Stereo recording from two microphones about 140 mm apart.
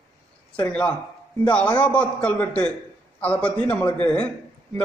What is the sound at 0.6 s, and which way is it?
A man's voice, 10° left (ahead or behind).